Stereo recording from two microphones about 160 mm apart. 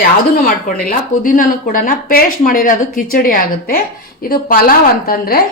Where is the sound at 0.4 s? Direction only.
65° left (ahead or behind).